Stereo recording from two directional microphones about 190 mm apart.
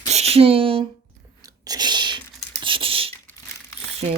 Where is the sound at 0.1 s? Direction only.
35° right (ahead or behind).